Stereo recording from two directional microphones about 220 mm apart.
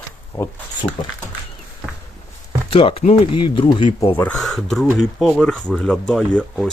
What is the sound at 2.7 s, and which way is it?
Speech, 25° left (ahead or behind).